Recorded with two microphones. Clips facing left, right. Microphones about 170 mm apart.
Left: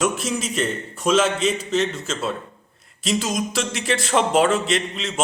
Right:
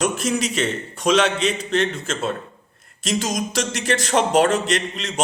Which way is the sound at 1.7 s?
55° right (ahead or behind).